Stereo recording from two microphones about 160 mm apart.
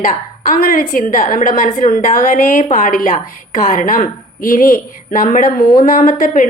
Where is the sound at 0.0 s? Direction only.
55° left (ahead or behind).